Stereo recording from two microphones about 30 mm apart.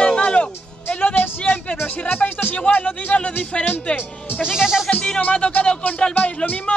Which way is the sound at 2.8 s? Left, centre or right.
Left.